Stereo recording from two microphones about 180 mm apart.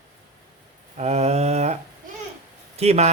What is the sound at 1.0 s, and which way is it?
Speech, 35° right (ahead or behind).